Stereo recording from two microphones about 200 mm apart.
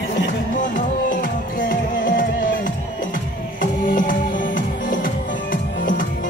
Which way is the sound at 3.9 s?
40° left (ahead or behind).